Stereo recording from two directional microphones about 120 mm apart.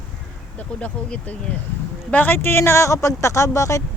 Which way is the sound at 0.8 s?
10° left (ahead or behind).